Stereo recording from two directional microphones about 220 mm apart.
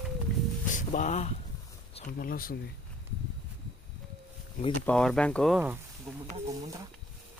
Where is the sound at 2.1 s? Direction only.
40° left (ahead or behind).